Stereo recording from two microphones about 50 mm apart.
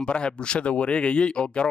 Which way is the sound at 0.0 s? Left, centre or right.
Centre.